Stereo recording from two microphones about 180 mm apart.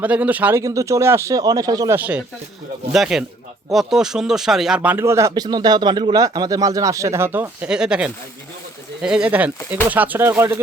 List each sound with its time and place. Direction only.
0.0 s speech: 10° right (ahead or behind)
2.0 s speech: 10° right (ahead or behind)